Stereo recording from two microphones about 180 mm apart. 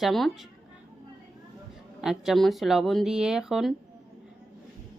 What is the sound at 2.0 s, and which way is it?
A woman's voice, centre (ahead or behind).